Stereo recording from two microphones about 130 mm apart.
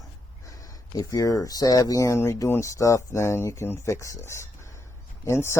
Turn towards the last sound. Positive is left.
turn(degrees=20)  # may be behind; listen again after turning